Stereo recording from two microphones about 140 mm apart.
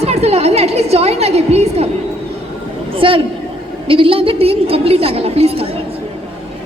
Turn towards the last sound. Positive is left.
turn(degrees=-45)  # may be behind; listen again after turning